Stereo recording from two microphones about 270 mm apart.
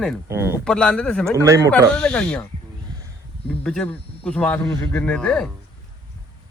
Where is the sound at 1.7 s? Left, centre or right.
Centre.